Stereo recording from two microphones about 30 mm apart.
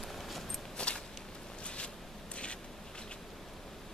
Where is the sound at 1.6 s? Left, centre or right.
Left.